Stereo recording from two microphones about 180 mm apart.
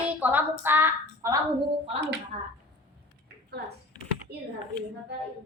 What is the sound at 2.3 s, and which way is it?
Speech, 40° right (ahead or behind).